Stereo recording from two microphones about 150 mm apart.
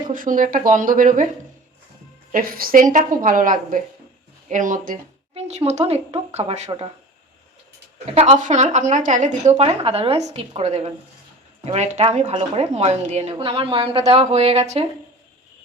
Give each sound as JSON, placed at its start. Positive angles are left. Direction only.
{"t": 0.1, "sound": "speech", "side_deg": -65}
{"t": 2.3, "sound": "a woman's voice", "side_deg": -75}
{"t": 5.3, "sound": "a woman's voice", "side_deg": -45}
{"t": 8.1, "sound": "a woman's voice", "side_deg": -40}
{"t": 8.4, "sound": "a woman's voice", "side_deg": -55}